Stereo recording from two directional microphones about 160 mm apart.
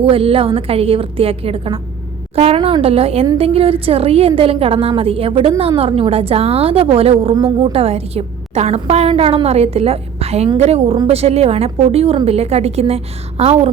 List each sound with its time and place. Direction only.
0.0 s a woman's voice: 35° right (ahead or behind)